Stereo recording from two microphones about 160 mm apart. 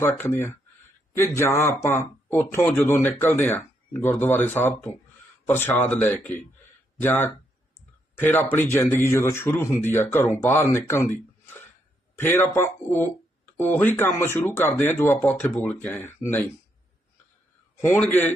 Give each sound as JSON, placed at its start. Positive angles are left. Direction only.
{"t": 0.0, "sound": "speech", "side_deg": 15}
{"t": 8.5, "sound": "speech", "side_deg": 15}
{"t": 18.1, "sound": "speech", "side_deg": 10}